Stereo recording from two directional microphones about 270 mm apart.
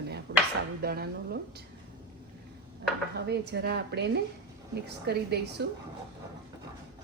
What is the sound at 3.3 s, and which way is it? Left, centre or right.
A woman's voice, right.